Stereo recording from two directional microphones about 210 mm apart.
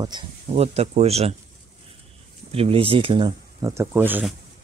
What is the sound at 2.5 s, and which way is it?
Speech, 25° right (ahead or behind).